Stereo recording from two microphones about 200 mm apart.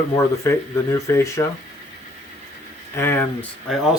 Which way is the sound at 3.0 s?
10° left (ahead or behind).